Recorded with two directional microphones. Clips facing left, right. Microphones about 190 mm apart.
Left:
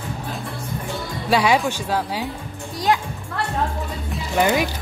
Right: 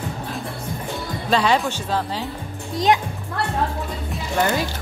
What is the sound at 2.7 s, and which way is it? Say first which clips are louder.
Speech: right 2 dB; 20° right (ahead or behind).